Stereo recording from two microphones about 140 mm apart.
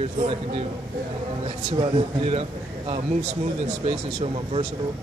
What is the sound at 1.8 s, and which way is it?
Speech, 40° right (ahead or behind).